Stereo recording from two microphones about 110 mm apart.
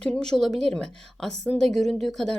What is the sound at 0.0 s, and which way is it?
A woman's voice, 5° left (ahead or behind).